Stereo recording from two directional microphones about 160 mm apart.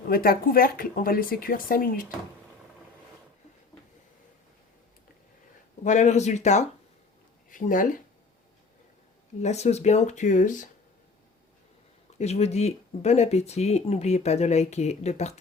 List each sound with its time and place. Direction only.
0.1 s speech: 65° left (ahead or behind)
5.8 s speech: 50° left (ahead or behind)
9.4 s speech: 45° left (ahead or behind)
12.1 s speech: 40° left (ahead or behind)